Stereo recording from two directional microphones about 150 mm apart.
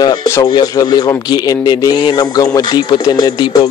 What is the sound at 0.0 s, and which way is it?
Speech, 25° left (ahead or behind).